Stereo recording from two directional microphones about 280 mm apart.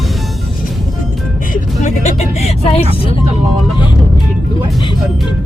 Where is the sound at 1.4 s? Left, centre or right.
Left.